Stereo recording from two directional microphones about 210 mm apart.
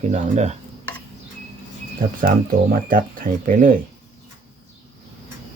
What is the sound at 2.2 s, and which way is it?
Speech, 40° right (ahead or behind).